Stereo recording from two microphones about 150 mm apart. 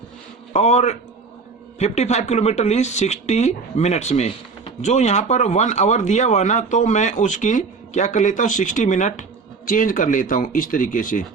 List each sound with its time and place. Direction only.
0.5 s speech: 50° left (ahead or behind)
9.6 s speech: 65° left (ahead or behind)